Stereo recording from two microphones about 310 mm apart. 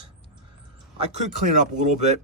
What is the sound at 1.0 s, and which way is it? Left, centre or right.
Speech, right.